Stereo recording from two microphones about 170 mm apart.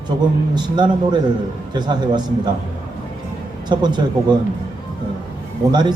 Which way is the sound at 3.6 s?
25° right (ahead or behind).